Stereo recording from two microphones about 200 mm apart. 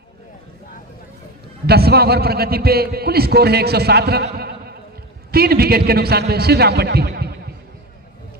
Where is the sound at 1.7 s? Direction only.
50° right (ahead or behind).